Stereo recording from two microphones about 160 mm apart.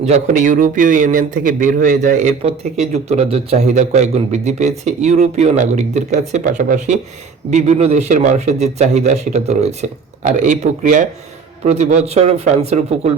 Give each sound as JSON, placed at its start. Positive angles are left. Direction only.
{"t": 0.0, "sound": "a man's voice", "side_deg": -45}